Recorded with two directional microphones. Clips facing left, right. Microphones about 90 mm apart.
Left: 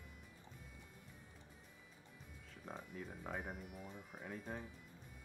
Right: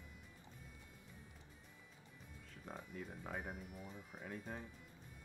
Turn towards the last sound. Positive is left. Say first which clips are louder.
# left 1 dB
turn(degrees=0)  # may be behind; listen again after turning